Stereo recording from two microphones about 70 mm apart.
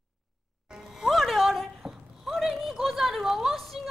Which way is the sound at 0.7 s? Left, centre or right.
Centre.